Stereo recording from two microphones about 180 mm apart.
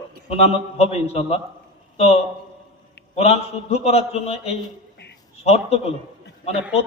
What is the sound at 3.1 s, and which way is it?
A man's voice, 35° left (ahead or behind).